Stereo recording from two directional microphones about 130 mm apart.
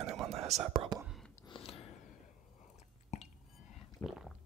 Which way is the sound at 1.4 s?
40° left (ahead or behind).